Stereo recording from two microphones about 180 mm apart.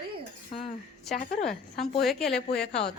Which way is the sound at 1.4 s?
Centre (ahead or behind).